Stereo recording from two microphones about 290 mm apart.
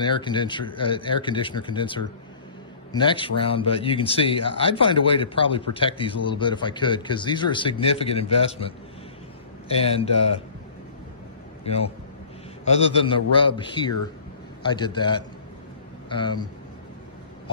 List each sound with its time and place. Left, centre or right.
0.0 s a man's voice: centre
11.6 s a man's voice: left